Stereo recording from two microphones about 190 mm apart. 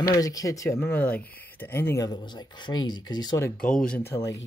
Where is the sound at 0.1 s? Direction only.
20° left (ahead or behind).